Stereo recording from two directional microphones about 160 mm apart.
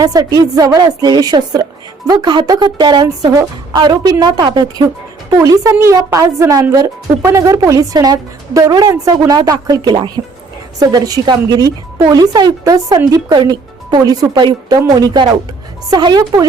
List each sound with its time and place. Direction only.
0.0 s a woman's voice: 25° right (ahead or behind)